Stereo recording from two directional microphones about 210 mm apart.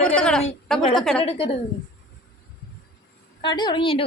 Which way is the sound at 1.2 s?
25° left (ahead or behind).